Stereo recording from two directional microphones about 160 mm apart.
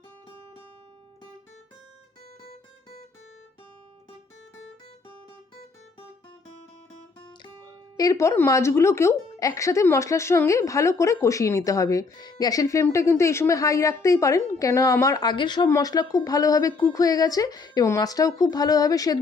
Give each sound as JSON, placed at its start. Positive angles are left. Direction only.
{"t": 7.9, "sound": "speech", "side_deg": 20}